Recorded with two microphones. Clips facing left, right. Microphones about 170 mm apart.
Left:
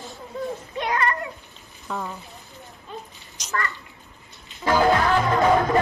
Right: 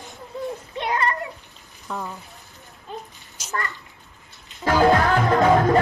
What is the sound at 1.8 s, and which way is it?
Speech, centre (ahead or behind).